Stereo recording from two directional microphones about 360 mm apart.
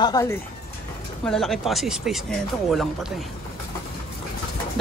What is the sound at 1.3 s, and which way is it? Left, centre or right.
Speech, centre.